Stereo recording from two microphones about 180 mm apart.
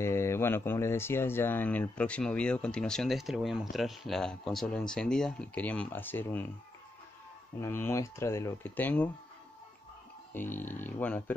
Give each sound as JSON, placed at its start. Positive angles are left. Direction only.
{"t": 0.0, "sound": "speech", "side_deg": 15}
{"t": 7.6, "sound": "speech", "side_deg": 15}
{"t": 10.3, "sound": "speech", "side_deg": 10}